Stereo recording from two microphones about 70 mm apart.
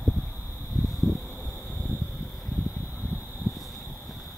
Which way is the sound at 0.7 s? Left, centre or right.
Centre.